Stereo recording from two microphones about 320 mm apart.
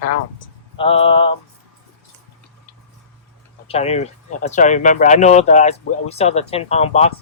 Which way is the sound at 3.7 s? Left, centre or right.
Centre.